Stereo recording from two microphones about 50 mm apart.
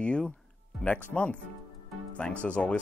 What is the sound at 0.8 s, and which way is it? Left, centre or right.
Speech, left.